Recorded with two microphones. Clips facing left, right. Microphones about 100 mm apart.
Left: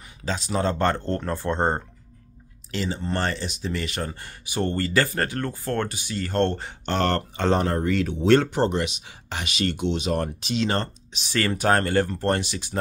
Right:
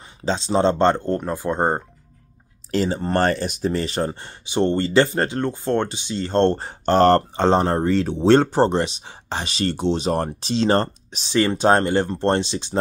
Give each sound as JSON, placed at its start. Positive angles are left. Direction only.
{"t": 0.2, "sound": "speech", "side_deg": -25}
{"t": 2.7, "sound": "speech", "side_deg": -45}
{"t": 3.7, "sound": "speech", "side_deg": -30}
{"t": 11.3, "sound": "speech", "side_deg": -25}